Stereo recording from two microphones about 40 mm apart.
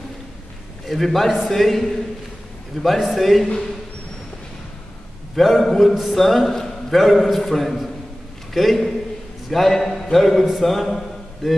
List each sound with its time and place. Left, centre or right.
0.8 s a man's voice: centre
5.3 s a man's voice: centre